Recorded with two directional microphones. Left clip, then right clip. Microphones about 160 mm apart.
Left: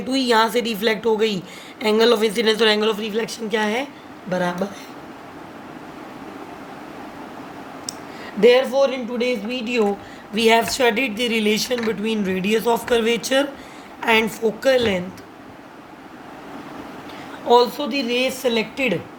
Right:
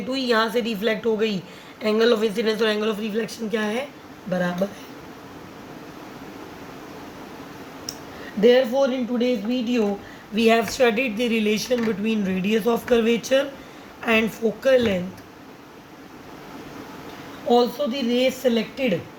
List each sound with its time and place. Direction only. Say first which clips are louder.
0.1 s speech: left 4 dB; 45° left (ahead or behind)
8.4 s speech: left 2 dB; 55° left (ahead or behind)
17.5 s speech: left 4 dB; 60° left (ahead or behind)